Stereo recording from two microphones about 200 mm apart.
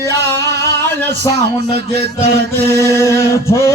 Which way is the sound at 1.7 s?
55° right (ahead or behind).